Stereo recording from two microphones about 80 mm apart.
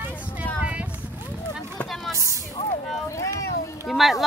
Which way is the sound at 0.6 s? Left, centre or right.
Centre.